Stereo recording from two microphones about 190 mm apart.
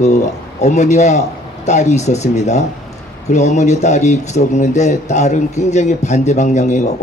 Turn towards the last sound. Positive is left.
turn(degrees=40)  # may be behind; listen again after turning